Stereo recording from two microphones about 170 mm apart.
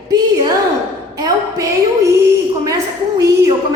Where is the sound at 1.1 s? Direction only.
20° right (ahead or behind).